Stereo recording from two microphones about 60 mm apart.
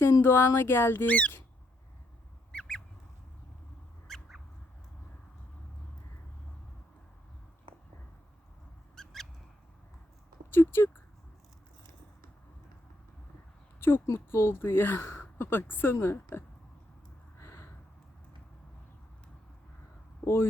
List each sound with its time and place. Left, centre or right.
0.0 s speech: left
1.0 s speech: left
2.5 s a sound: centre
4.1 s a sound: centre
9.0 s a sound: centre
10.5 s speech: left
13.7 s speech: left
17.3 s gasp: left
20.2 s speech: left